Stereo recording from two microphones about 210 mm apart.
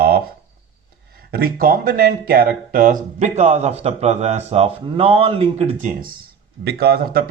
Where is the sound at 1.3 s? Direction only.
45° right (ahead or behind).